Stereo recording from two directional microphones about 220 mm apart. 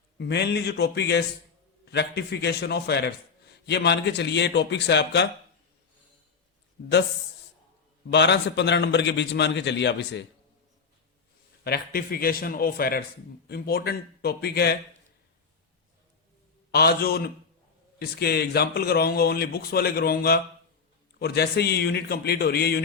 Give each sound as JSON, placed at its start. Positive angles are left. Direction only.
{"t": 0.2, "sound": "a man's voice", "side_deg": 50}
{"t": 8.1, "sound": "a man's voice", "side_deg": 50}
{"t": 11.6, "sound": "a man's voice", "side_deg": 45}
{"t": 16.7, "sound": "a man's voice", "side_deg": 45}